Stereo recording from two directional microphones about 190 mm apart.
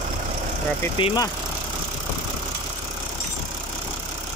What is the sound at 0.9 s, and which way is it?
Speech, 25° left (ahead or behind).